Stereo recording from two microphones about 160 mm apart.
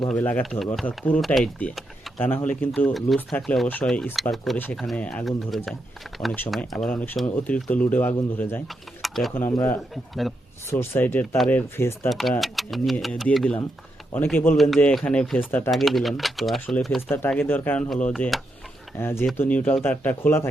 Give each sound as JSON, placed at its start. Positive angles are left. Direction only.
{"t": 0.2, "sound": "speech", "side_deg": 10}
{"t": 0.6, "sound": "speech", "side_deg": 0}
{"t": 4.5, "sound": "speech", "side_deg": 10}
{"t": 9.0, "sound": "a sound", "side_deg": 0}
{"t": 9.3, "sound": "speech", "side_deg": 10}
{"t": 9.9, "sound": "speech", "side_deg": 0}
{"t": 10.7, "sound": "speech", "side_deg": 15}
{"t": 12.0, "sound": "speech", "side_deg": 0}
{"t": 17.1, "sound": "speech", "side_deg": 10}
{"t": 18.9, "sound": "speech", "side_deg": 15}